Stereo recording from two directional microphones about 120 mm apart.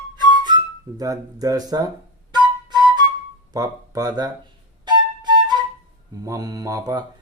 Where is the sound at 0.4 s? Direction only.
35° right (ahead or behind).